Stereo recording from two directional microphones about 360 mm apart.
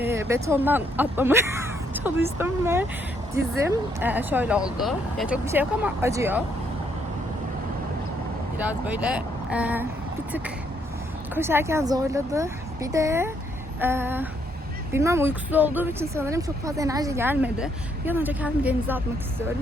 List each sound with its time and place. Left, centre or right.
0.0 s speech: centre
8.9 s speech: centre
11.3 s speech: centre